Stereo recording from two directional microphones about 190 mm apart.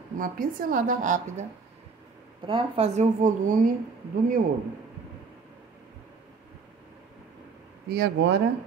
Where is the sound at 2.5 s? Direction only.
30° right (ahead or behind).